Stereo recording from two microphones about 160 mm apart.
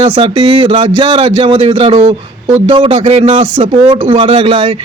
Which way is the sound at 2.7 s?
35° right (ahead or behind).